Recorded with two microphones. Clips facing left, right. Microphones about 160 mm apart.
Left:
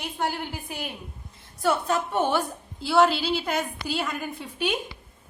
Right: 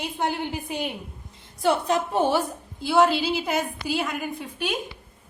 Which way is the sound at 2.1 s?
35° right (ahead or behind).